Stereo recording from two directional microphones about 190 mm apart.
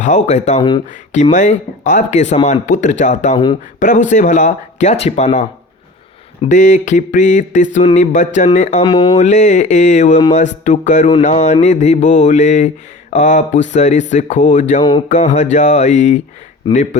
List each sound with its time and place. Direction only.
0.0 s mantra: 40° left (ahead or behind)
3.3 s speech: 25° left (ahead or behind)
3.8 s mantra: 40° left (ahead or behind)
8.8 s speech: 25° left (ahead or behind)
9.1 s mantra: 40° left (ahead or behind)
14.8 s speech: 25° left (ahead or behind)
15.1 s mantra: 40° left (ahead or behind)